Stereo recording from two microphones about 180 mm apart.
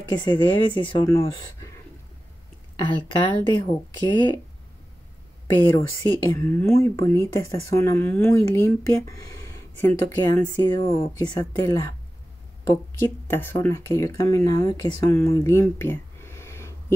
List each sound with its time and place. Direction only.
0.1 s speech: 25° left (ahead or behind)
2.8 s speech: 25° left (ahead or behind)
5.8 s speech: 15° left (ahead or behind)
13.0 s speech: 10° left (ahead or behind)